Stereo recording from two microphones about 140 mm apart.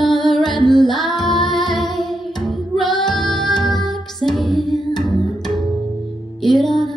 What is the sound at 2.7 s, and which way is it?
Music, 35° left (ahead or behind).